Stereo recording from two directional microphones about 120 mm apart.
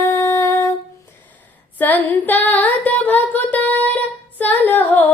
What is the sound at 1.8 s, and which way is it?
Female singing, 15° left (ahead or behind).